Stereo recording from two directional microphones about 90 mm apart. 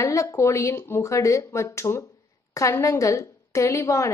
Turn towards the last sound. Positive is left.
turn(degrees=35)  # may be behind; listen again after turning